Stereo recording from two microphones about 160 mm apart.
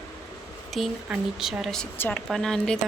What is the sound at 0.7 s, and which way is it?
A woman's voice, centre (ahead or behind).